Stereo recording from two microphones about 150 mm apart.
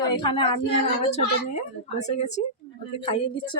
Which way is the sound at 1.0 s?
50° left (ahead or behind).